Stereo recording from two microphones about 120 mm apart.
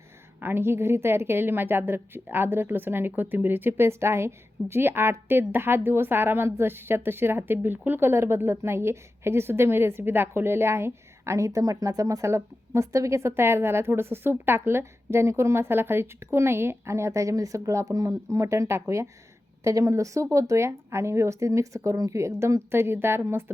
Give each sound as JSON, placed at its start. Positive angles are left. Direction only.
{"t": 0.3, "sound": "a woman's voice", "side_deg": -15}